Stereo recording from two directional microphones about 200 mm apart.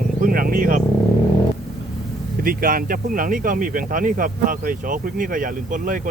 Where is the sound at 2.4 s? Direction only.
45° right (ahead or behind).